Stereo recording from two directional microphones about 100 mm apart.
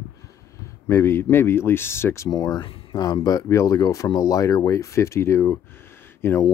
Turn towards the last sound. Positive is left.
turn(degrees=25)  # may be behind; listen again after turning